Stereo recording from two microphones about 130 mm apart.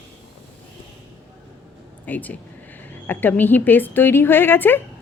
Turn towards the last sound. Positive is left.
turn(degrees=15)  # may be behind; listen again after turning